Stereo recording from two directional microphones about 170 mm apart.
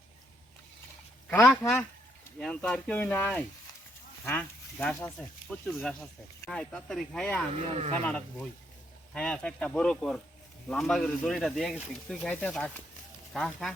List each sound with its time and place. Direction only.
1.3 s speech: 5° left (ahead or behind)
7.5 s speech: 35° right (ahead or behind)
8.0 s speech: 5° left (ahead or behind)